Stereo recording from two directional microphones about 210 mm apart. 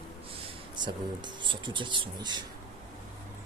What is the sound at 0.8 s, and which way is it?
Speech, 20° right (ahead or behind).